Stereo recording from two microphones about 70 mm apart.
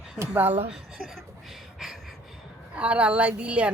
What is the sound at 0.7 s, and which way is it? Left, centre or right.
Speech, centre.